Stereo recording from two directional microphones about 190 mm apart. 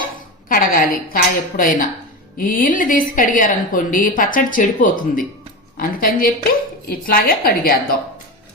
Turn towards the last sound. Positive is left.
turn(degrees=50)  # may be behind; listen again after turning